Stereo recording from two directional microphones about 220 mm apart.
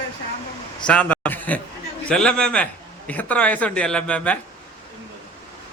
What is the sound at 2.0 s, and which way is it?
A man's voice, 5° left (ahead or behind).